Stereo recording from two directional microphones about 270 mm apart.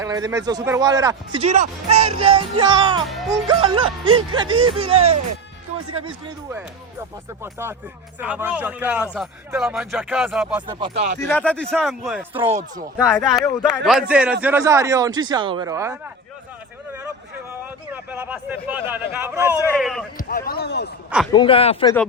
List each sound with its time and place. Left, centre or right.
0.0 s speech: centre
3.6 s music: centre
7.4 s speech: centre
10.7 s music: centre
11.2 s speech: centre
17.6 s speech: centre
20.1 s speech: left
21.3 s speech: centre